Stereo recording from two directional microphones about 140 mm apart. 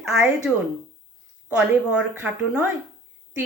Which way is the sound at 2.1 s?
10° right (ahead or behind).